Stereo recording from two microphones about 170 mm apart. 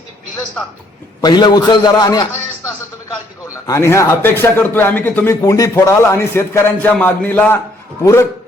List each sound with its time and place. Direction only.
1.2 s a man's voice: 25° left (ahead or behind)
3.7 s a man's voice: 15° left (ahead or behind)